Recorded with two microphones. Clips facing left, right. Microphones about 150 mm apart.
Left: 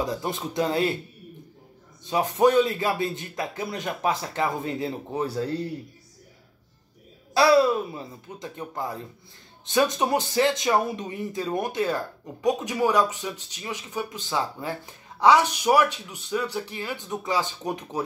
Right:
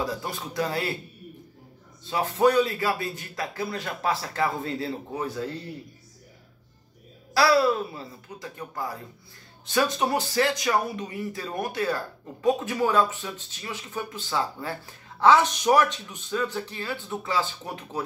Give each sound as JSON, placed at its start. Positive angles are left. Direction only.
{"t": 0.0, "sound": "speech", "side_deg": 20}
{"t": 2.0, "sound": "speech", "side_deg": 20}
{"t": 7.3, "sound": "speech", "side_deg": 20}